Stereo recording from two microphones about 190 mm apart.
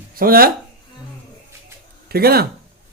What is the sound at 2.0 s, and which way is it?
Speech, 55° right (ahead or behind).